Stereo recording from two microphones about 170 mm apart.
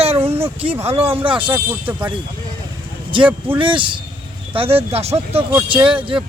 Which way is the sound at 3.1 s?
30° right (ahead or behind).